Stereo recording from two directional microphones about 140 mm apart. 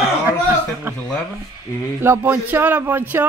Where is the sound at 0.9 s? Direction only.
15° right (ahead or behind).